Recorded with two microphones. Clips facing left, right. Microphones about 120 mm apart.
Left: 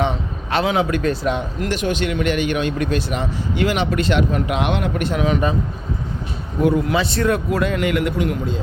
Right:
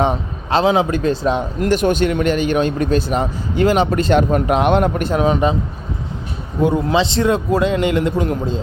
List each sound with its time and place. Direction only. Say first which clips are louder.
0.0 s speech: right 3 dB; 30° right (ahead or behind)
6.6 s a man's voice: right 2 dB; 25° right (ahead or behind)